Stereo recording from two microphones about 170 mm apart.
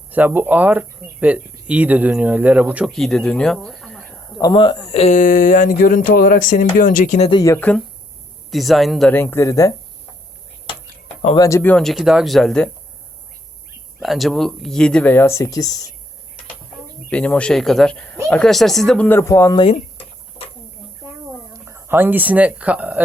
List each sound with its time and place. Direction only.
0.1 s speech: 10° right (ahead or behind)
2.9 s speech: centre (ahead or behind)
4.4 s speech: 25° left (ahead or behind); by 7.3 s 45° left (ahead or behind)
7.3 s speech: 20° left (ahead or behind); by 9.1 s centre (ahead or behind)
9.1 s speech: 15° left (ahead or behind)
11.3 s speech: 15° left (ahead or behind)
14.0 s speech: centre (ahead or behind); by 15.9 s 20° left (ahead or behind)
17.1 s speech: 5° left (ahead or behind)
21.5 s speech: 15° right (ahead or behind)